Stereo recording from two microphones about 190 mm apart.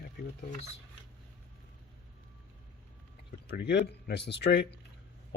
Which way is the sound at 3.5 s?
60° left (ahead or behind).